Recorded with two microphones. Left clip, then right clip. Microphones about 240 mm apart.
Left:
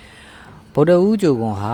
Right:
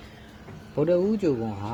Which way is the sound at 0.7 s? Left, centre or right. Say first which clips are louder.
Left 9 dB; left.